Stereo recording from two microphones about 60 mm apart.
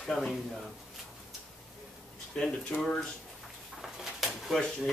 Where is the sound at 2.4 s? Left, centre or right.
Centre.